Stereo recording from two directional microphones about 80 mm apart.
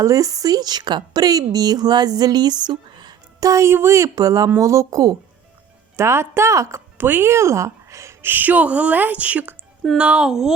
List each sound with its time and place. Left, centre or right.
0.0 s a woman's voice: right
3.4 s speech: right
6.0 s speech: right
7.0 s a woman's voice: right
8.3 s a woman's voice: right; by 10.5 s centre